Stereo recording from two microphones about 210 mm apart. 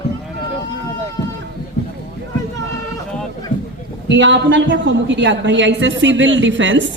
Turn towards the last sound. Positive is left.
turn(degrees=-60)  # may be behind; listen again after turning